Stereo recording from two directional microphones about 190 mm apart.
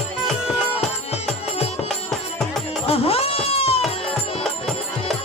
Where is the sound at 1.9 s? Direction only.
Centre (ahead or behind).